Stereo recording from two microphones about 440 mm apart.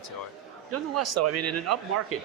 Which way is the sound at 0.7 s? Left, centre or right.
Right.